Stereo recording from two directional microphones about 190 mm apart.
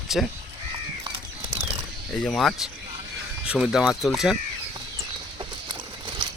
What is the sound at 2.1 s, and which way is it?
Speech, 5° left (ahead or behind).